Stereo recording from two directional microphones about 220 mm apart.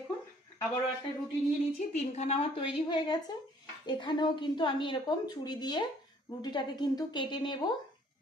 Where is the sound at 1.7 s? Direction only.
30° left (ahead or behind).